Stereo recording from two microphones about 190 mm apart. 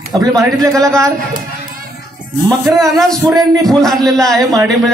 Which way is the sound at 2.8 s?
Centre (ahead or behind).